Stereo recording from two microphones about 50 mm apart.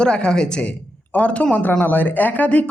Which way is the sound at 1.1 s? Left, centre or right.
Left.